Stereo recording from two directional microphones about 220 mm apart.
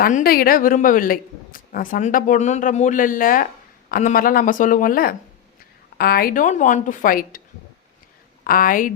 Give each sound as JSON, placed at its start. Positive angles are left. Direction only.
{"t": 0.0, "sound": "a woman's voice", "side_deg": 40}
{"t": 8.4, "sound": "a woman's voice", "side_deg": 40}